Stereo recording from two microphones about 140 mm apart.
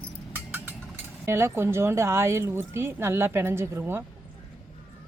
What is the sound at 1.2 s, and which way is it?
Speech, 15° right (ahead or behind).